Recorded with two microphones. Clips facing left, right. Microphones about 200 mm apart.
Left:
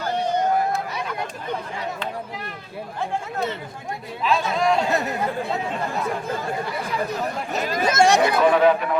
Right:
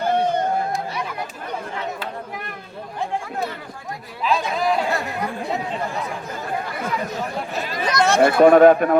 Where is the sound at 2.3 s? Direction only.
55° right (ahead or behind).